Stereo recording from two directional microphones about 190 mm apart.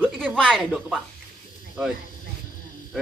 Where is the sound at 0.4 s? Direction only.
Centre (ahead or behind).